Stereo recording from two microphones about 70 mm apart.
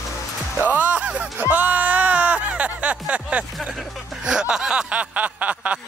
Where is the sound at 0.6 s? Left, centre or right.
Right.